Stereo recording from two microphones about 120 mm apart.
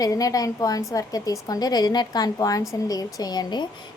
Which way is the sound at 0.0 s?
30° left (ahead or behind).